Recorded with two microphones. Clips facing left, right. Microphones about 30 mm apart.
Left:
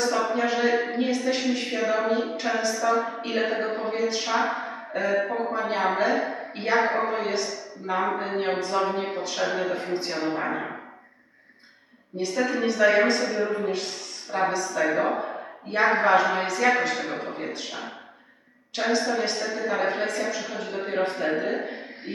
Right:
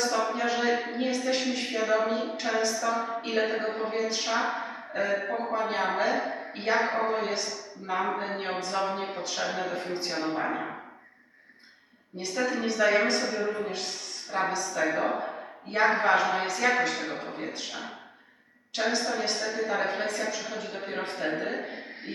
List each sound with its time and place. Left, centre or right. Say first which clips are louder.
0.0 s a sound: left 3 dB; centre
0.4 s a woman's voice: left 4 dB; centre
9.9 s a woman's voice: left 3 dB; centre
12.3 s a woman's voice: left 3 dB; centre
14.9 s speech: left 3 dB; left
15.9 s a woman's voice: left 5 dB; centre